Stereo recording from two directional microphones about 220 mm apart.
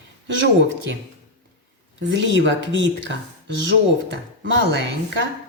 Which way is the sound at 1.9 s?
55° right (ahead or behind).